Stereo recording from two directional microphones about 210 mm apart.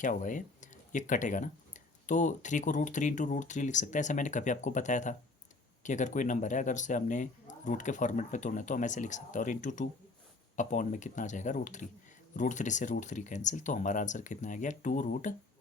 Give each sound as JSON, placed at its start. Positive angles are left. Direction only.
{"t": 0.0, "sound": "speech", "side_deg": 40}